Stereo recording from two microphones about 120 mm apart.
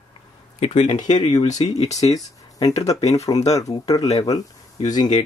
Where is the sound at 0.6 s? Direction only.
70° left (ahead or behind).